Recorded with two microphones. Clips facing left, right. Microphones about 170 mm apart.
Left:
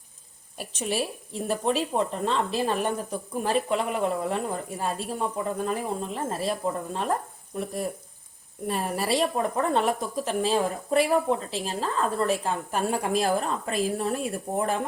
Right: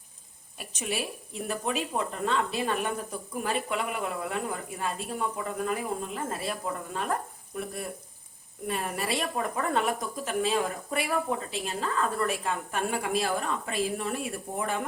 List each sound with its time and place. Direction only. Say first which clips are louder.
0.6 s speech: left 4 dB; 30° left (ahead or behind)